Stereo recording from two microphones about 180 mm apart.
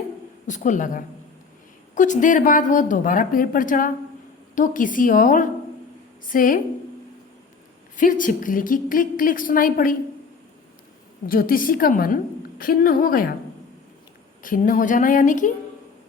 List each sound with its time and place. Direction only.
0.4 s a woman's voice: 45° left (ahead or behind)
7.9 s a woman's voice: 50° left (ahead or behind)
11.3 s a woman's voice: 50° left (ahead or behind)
14.4 s a woman's voice: 45° left (ahead or behind)